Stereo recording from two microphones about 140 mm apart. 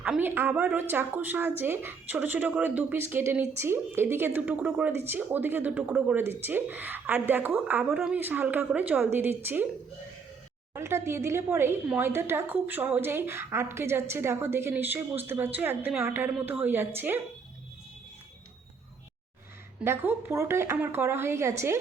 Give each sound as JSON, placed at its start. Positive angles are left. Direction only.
{"t": 0.0, "sound": "a woman's voice", "side_deg": -10}
{"t": 10.8, "sound": "a woman's voice", "side_deg": -20}
{"t": 19.8, "sound": "a woman's voice", "side_deg": -15}